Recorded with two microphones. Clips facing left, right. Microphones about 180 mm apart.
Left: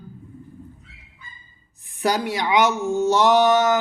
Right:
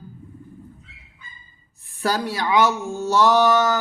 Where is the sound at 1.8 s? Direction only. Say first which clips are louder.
Left 1 dB; 20° left (ahead or behind).